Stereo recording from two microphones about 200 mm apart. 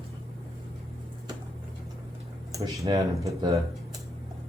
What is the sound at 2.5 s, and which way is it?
Speech, 15° right (ahead or behind).